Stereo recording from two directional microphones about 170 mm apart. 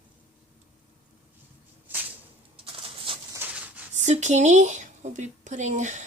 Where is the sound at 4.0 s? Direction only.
45° right (ahead or behind).